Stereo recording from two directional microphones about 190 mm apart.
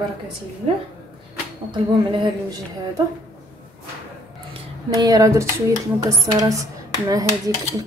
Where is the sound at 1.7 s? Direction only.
25° right (ahead or behind).